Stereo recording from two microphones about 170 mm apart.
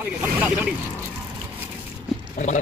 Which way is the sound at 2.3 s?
45° left (ahead or behind).